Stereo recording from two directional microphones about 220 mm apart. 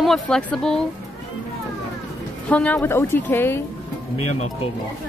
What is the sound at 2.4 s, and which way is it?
Speech, 5° left (ahead or behind).